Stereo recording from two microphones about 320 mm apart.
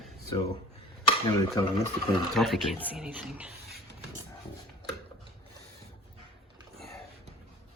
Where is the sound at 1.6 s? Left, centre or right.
Centre.